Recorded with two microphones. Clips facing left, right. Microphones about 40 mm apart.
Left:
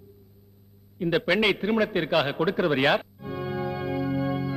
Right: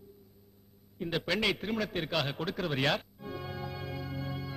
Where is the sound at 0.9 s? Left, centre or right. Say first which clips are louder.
Left 9 dB; left.